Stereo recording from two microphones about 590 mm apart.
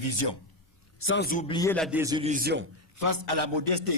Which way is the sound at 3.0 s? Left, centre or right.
Right.